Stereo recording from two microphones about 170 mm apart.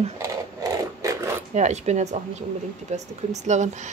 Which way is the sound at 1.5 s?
40° right (ahead or behind).